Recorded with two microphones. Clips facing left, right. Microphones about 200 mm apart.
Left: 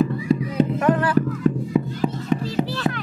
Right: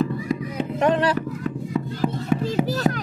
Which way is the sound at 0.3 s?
30° left (ahead or behind).